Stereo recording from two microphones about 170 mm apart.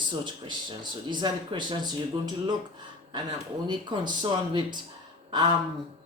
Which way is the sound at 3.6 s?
30° right (ahead or behind).